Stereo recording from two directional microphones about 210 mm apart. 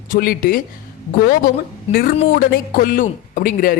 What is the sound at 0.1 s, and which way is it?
Speech, 45° left (ahead or behind).